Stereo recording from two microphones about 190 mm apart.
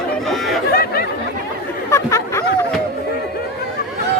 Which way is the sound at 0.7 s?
50° left (ahead or behind).